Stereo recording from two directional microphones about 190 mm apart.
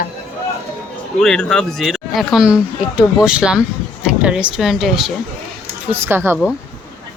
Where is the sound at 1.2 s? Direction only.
5° left (ahead or behind); by 6.4 s 10° right (ahead or behind).